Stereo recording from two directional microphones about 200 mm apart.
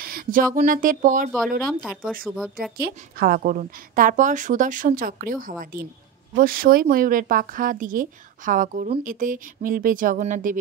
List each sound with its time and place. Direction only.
0.0 s a sound: 45° right (ahead or behind)
0.6 s speech: 45° right (ahead or behind)
1.8 s speech: centre (ahead or behind)
2.8 s a woman's voice: 50° right (ahead or behind)